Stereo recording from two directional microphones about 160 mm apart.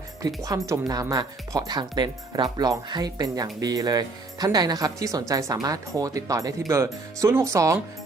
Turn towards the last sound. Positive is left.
turn(degrees=-20)  # may be behind; listen again after turning